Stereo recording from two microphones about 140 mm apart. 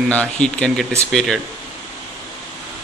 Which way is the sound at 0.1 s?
5° left (ahead or behind).